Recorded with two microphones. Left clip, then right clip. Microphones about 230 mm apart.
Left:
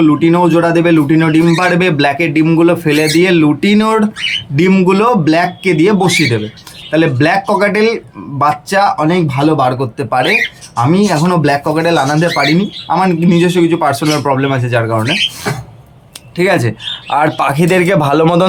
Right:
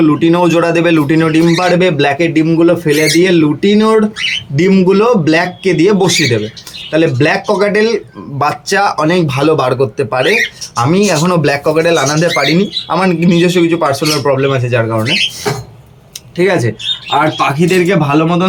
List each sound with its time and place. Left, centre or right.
0.0 s speech: centre
16.4 s speech: centre
17.4 s a man's voice: centre